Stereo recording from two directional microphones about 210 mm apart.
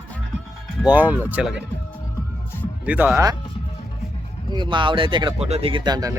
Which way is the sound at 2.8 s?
5° right (ahead or behind).